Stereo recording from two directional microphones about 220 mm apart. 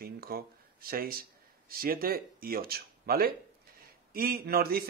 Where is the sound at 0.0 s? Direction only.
45° right (ahead or behind).